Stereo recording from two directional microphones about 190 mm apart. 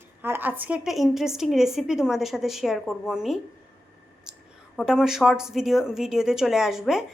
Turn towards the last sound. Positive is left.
turn(degrees=0)  # may be behind; listen again after turning